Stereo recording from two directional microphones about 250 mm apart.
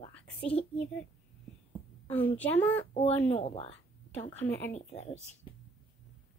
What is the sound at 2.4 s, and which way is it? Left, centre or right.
Speech, centre.